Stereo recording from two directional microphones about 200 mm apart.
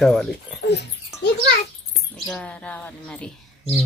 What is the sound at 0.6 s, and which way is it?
Dog, 55° left (ahead or behind).